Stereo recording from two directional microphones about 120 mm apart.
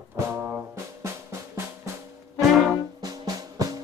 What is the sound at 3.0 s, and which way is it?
Music, 30° right (ahead or behind).